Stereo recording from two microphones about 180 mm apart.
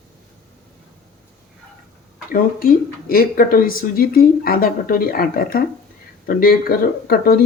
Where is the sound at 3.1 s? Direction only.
55° left (ahead or behind).